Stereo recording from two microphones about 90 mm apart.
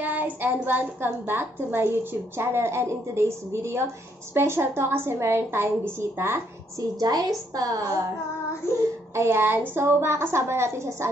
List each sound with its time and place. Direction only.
0.0 s a child's voice: 20° right (ahead or behind)
7.0 s a woman's voice: 45° right (ahead or behind)
9.1 s a child's voice: 30° right (ahead or behind)